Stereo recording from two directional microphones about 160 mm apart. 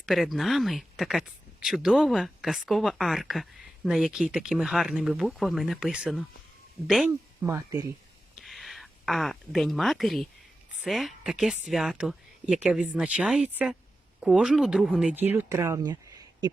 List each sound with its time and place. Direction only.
0.0 s speech: centre (ahead or behind)
7.1 s speech: 15° right (ahead or behind)
8.4 s a sound: centre (ahead or behind)
10.8 s speech: centre (ahead or behind); by 16.5 s 25° right (ahead or behind)